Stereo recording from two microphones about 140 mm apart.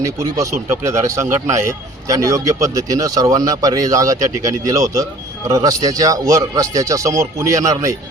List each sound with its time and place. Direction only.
0.0 s speech: 20° right (ahead or behind)